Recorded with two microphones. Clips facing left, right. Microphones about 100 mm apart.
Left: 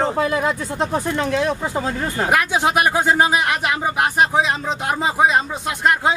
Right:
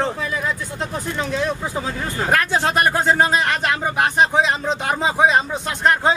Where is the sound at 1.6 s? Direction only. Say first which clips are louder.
Left 3 dB; 30° left (ahead or behind).